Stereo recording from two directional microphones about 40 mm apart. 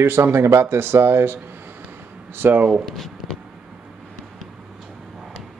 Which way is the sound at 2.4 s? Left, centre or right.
Right.